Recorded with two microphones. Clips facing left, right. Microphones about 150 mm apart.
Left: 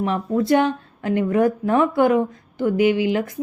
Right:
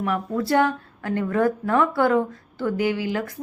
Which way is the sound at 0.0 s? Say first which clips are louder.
Left 4 dB; 20° left (ahead or behind).